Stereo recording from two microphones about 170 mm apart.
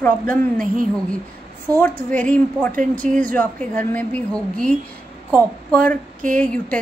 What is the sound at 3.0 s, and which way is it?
Speech, 45° right (ahead or behind).